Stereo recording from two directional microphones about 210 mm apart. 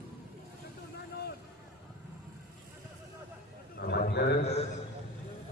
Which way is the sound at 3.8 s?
50° left (ahead or behind).